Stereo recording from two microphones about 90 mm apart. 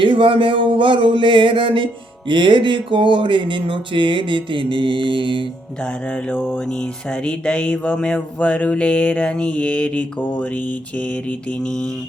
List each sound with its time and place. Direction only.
0.0 s speech: 70° right (ahead or behind)
5.8 s music: 10° left (ahead or behind)